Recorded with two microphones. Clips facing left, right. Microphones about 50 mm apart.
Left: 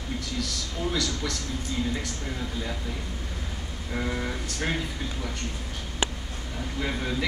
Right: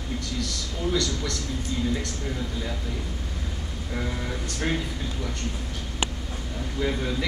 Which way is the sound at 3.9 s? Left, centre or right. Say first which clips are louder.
Left 1 dB; centre.